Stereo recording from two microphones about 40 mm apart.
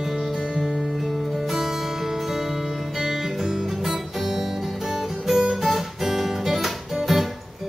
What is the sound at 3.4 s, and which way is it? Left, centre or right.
Music, centre.